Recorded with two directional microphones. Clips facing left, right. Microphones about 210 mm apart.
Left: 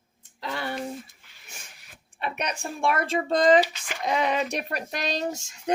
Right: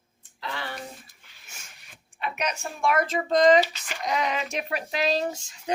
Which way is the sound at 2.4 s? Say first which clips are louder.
Even; 30° left (ahead or behind).